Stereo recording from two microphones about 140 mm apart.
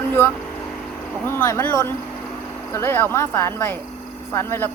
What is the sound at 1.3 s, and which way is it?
Speech, 15° left (ahead or behind).